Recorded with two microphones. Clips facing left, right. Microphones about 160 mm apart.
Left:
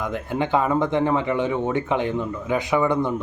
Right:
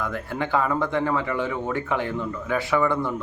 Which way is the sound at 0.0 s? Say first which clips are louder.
Left 3 dB; 20° left (ahead or behind).